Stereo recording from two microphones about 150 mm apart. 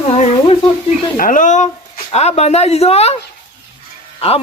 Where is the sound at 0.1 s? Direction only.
45° left (ahead or behind).